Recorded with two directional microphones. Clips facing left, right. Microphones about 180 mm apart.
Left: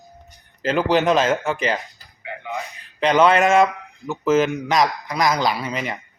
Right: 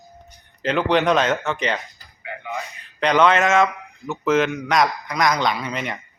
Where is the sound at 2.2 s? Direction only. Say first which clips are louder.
Left 1 dB; 15° left (ahead or behind).